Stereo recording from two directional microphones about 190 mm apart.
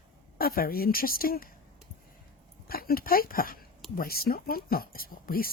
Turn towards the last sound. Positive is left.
turn(degrees=50)  # may be behind; listen again after turning